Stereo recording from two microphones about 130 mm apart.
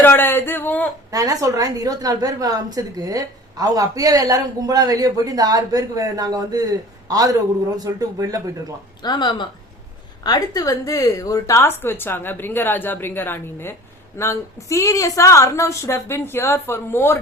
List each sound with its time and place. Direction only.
0.0 s speech: 15° left (ahead or behind)
1.1 s a woman's voice: 25° right (ahead or behind)
9.0 s a woman's voice: 35° left (ahead or behind); by 17.2 s 20° left (ahead or behind)